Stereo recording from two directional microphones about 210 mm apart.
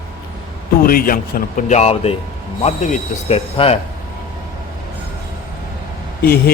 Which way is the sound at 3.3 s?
25° left (ahead or behind).